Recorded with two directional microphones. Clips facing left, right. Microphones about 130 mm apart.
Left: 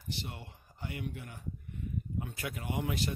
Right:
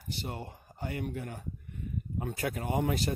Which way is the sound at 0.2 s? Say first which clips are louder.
Right 5 dB; 40° right (ahead or behind).